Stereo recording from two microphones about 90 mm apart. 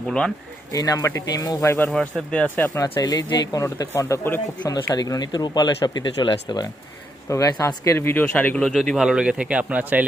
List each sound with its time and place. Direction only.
0.7 s speech: 45° left (ahead or behind)
1.6 s speech: 30° left (ahead or behind)
1.9 s speech: 5° left (ahead or behind)
2.6 s speech: 40° left (ahead or behind)
3.6 s speech: 35° left (ahead or behind)
4.6 s speech: 50° left (ahead or behind)
7.3 s speech: 35° left (ahead or behind)
7.9 s speech: 25° left (ahead or behind); by 10.0 s 15° right (ahead or behind)